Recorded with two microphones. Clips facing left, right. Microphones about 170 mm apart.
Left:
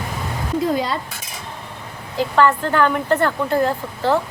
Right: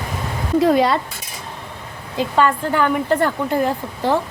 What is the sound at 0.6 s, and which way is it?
Speech, 70° right (ahead or behind).